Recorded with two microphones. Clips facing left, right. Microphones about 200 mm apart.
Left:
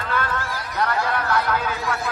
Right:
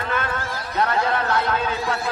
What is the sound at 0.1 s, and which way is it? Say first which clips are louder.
Chatter: left 2 dB; 20° right (ahead or behind).